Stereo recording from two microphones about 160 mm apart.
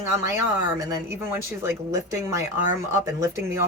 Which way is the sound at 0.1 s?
15° right (ahead or behind).